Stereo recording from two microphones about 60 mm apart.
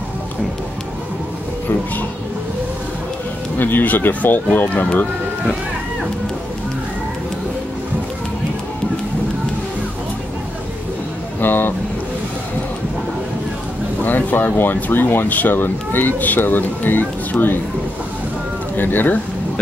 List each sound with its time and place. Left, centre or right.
3.5 s speech: left
11.4 s speech: left
14.0 s speech: left
18.8 s speech: left